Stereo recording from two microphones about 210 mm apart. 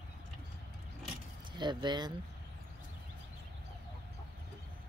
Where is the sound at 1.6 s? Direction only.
20° right (ahead or behind).